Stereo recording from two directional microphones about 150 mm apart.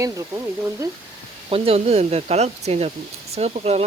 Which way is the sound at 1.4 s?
40° right (ahead or behind).